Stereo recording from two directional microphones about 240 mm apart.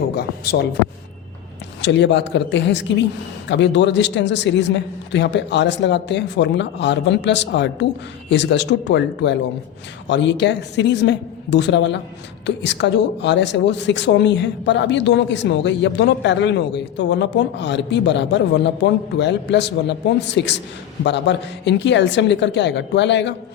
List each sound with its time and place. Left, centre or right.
0.2 s speech: left
1.8 s speech: left